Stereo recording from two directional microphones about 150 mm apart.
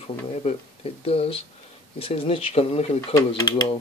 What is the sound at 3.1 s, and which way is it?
Speech, 25° left (ahead or behind).